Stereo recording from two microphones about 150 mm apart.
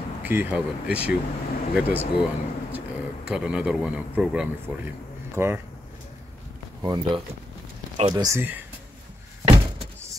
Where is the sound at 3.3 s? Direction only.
5° right (ahead or behind).